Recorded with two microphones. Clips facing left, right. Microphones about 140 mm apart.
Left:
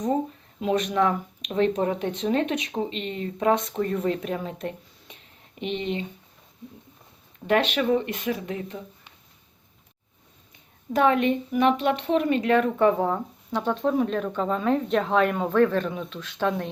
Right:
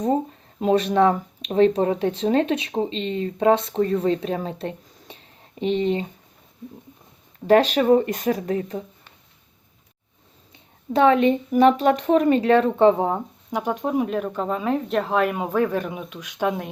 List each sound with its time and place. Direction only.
0.6 s speech: 35° right (ahead or behind)
4.4 s a sound: 30° right (ahead or behind)
7.4 s speech: 35° right (ahead or behind)
10.9 s a woman's voice: 30° right (ahead or behind); by 16.6 s 15° right (ahead or behind)